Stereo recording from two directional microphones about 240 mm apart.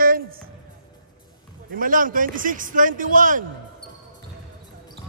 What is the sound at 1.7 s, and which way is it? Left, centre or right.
A man's voice, right.